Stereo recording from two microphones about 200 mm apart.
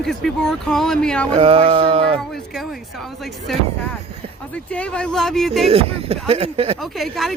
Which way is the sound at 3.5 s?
Centre (ahead or behind).